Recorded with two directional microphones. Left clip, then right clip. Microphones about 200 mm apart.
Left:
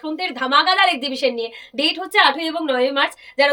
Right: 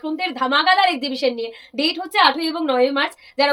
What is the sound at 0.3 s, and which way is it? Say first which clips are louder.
Speech: left 1 dB; 20° left (ahead or behind).